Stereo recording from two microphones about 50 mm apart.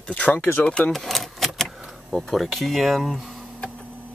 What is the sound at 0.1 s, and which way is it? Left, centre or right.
Speech, left.